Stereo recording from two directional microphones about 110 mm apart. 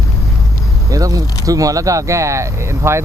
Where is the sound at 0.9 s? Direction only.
30° right (ahead or behind).